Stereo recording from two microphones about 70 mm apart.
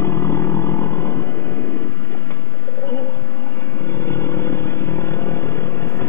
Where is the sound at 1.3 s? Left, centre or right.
Left.